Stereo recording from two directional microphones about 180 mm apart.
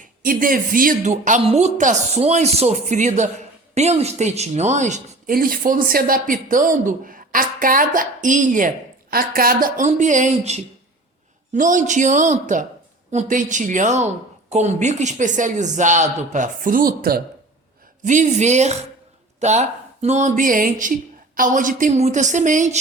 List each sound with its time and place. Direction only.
0.0 s speech: 50° right (ahead or behind)
18.0 s speech: 45° right (ahead or behind)